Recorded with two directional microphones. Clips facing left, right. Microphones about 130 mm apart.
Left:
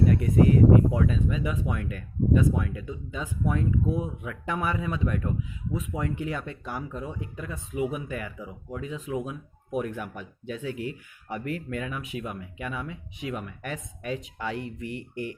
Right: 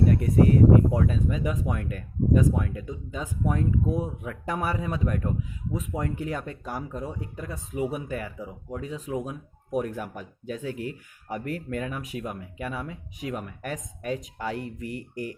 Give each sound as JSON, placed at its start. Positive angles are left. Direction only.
{"t": 0.1, "sound": "speech", "side_deg": -40}